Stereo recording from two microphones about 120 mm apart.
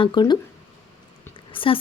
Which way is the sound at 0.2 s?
40° left (ahead or behind).